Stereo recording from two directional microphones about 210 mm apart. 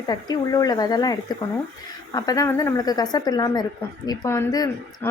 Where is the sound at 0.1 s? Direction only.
20° left (ahead or behind).